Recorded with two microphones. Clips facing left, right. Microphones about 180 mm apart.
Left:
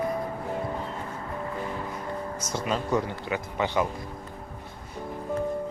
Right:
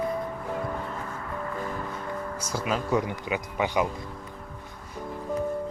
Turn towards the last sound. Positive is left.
turn(degrees=-15)  # may be behind; listen again after turning